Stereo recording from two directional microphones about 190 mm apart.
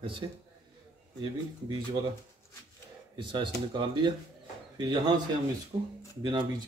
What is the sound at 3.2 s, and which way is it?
Speech, 25° right (ahead or behind).